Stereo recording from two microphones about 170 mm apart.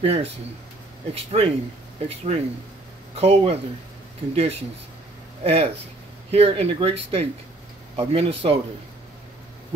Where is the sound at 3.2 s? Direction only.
35° right (ahead or behind).